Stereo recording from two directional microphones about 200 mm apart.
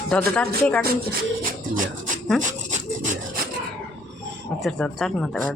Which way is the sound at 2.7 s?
40° right (ahead or behind).